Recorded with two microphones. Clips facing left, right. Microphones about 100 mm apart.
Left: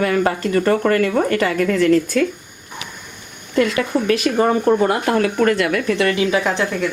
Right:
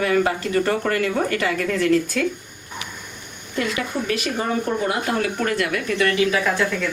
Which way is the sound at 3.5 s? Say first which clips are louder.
Left 7 dB; 60° left (ahead or behind).